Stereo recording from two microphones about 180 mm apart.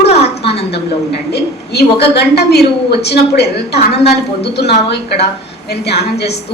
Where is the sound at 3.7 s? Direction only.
35° left (ahead or behind).